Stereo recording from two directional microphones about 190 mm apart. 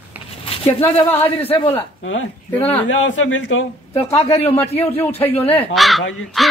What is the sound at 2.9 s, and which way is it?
Speech, 75° left (ahead or behind).